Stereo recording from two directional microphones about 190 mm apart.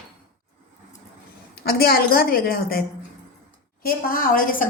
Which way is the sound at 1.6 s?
55° left (ahead or behind).